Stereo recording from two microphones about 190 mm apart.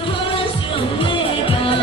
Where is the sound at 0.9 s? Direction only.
25° left (ahead or behind).